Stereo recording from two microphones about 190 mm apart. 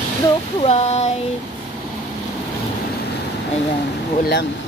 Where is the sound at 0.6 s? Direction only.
35° left (ahead or behind).